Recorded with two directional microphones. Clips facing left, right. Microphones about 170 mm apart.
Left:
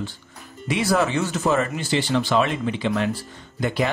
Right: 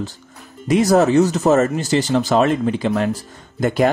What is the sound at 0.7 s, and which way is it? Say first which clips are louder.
Speech: right 7 dB; 40° right (ahead or behind).